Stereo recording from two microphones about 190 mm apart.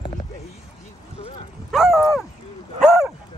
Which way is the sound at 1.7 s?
Centre (ahead or behind).